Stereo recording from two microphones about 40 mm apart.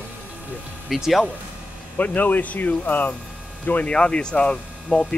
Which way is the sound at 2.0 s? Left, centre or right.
Left.